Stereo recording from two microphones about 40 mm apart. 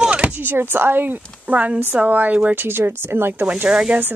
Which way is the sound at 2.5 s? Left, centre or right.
Right.